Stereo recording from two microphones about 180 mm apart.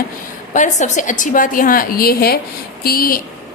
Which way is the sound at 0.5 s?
45° left (ahead or behind).